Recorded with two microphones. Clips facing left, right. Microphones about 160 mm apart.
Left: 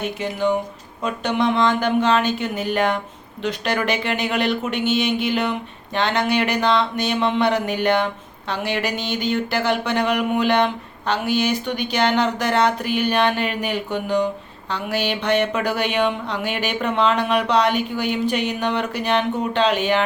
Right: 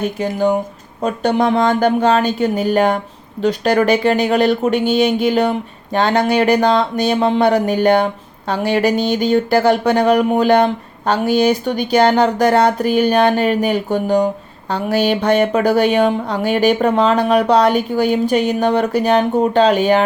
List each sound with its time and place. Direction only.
0.0 s speech: 40° right (ahead or behind)